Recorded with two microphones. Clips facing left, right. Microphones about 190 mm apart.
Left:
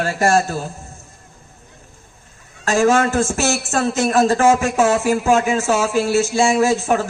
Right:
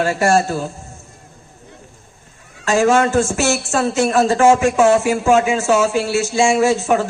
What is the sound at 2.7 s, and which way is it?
Music, 40° left (ahead or behind).